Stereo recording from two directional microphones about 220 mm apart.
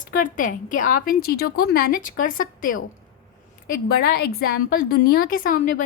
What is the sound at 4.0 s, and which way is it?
A woman's voice, 45° left (ahead or behind).